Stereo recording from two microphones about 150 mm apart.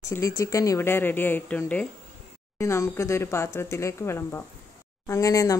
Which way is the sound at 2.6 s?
20° left (ahead or behind).